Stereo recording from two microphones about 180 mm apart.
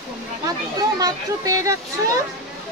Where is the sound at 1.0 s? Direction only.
20° right (ahead or behind).